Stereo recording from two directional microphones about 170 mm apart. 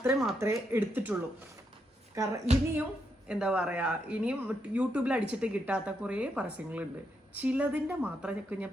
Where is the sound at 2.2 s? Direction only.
20° right (ahead or behind).